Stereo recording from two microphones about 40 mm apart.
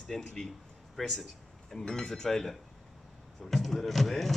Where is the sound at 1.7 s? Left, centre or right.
Centre.